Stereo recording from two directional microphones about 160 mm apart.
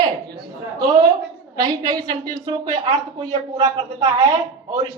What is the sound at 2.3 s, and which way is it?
Speech, 45° right (ahead or behind).